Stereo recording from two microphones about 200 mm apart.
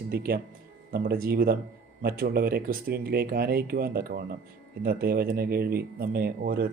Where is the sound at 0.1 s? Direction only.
50° right (ahead or behind).